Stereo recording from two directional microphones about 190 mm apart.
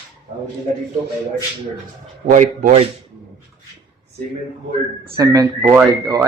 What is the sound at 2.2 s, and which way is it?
Speech, 40° right (ahead or behind).